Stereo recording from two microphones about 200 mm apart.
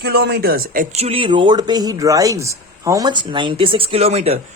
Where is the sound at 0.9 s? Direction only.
30° right (ahead or behind).